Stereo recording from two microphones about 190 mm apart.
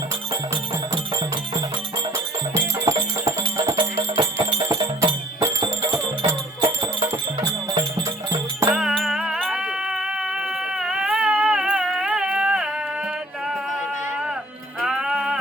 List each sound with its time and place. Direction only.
2.8 s music: 15° right (ahead or behind)
4.6 s music: 15° right (ahead or behind)
8.7 s music: centre (ahead or behind)
10.8 s a sound: 5° right (ahead or behind)
14.8 s music: 5° right (ahead or behind)